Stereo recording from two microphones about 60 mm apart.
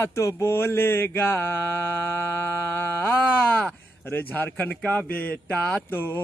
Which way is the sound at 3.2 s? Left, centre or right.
Left.